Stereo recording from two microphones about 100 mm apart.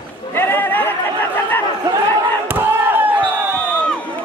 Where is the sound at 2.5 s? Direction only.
20° right (ahead or behind).